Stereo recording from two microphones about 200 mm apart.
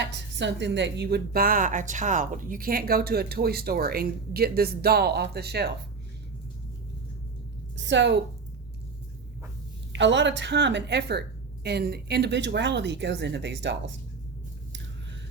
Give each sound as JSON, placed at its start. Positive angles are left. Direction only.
{"t": 0.0, "sound": "a woman's voice", "side_deg": -60}
{"t": 7.8, "sound": "a woman's voice", "side_deg": -65}
{"t": 9.9, "sound": "a woman's voice", "side_deg": -65}